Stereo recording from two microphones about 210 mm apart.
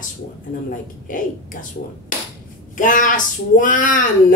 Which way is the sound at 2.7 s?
40° left (ahead or behind).